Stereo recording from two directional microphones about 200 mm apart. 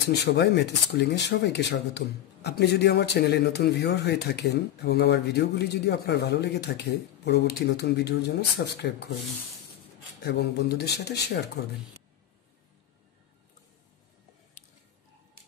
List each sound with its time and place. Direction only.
0.1 s speech: 55° left (ahead or behind)
10.2 s speech: 55° left (ahead or behind)